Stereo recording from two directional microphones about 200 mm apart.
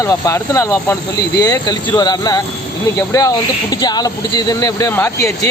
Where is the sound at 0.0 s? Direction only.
15° left (ahead or behind).